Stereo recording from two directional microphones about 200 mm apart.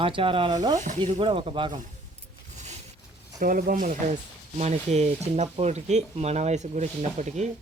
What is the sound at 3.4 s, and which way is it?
Speech, 45° right (ahead or behind).